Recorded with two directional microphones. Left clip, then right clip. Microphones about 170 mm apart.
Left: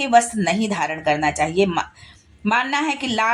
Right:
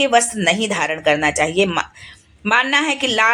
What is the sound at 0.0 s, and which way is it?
Speech, 30° right (ahead or behind).